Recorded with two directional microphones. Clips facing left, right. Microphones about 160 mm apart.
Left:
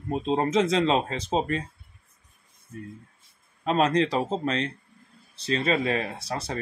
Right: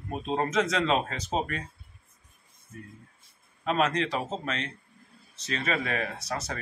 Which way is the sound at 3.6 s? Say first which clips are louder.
Left 4 dB; 35° left (ahead or behind).